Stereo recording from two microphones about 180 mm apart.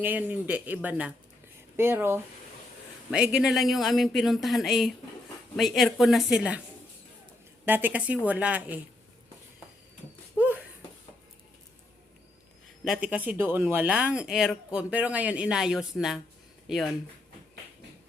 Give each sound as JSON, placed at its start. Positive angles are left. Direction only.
{"t": 0.0, "sound": "speech", "side_deg": -10}
{"t": 7.6, "sound": "speech", "side_deg": -10}
{"t": 10.3, "sound": "a sound", "side_deg": -10}
{"t": 12.8, "sound": "speech", "side_deg": -5}